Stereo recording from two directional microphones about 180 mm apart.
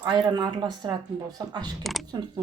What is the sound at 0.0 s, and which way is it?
Speech, 25° right (ahead or behind).